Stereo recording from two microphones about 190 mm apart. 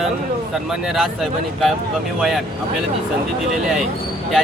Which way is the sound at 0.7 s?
Centre (ahead or behind).